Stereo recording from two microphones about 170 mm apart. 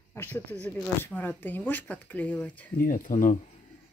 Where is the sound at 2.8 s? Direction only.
50° left (ahead or behind).